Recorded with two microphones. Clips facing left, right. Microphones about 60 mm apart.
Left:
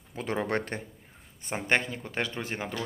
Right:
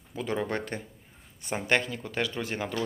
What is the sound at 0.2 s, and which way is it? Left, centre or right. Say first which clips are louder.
Speech: left 1 dB; left.